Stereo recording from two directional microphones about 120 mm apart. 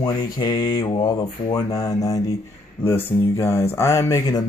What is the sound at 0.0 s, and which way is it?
Speech, 35° left (ahead or behind).